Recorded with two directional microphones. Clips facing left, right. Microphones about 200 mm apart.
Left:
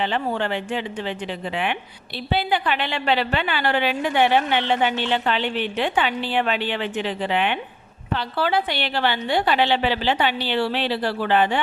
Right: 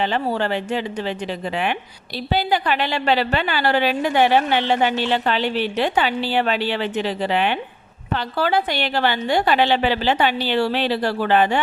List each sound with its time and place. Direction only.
0.0 s a woman's voice: 40° right (ahead or behind)